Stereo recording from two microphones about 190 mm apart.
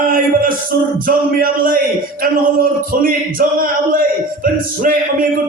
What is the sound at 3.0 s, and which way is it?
Speech, 50° right (ahead or behind).